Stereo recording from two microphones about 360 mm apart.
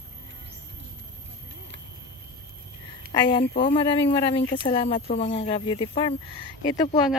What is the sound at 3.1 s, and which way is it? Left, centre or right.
Speech, centre.